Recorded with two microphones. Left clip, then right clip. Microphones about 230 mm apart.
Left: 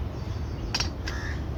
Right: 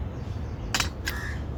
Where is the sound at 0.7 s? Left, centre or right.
Right.